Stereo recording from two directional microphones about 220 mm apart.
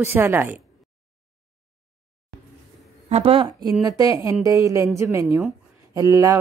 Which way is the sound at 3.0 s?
25° right (ahead or behind).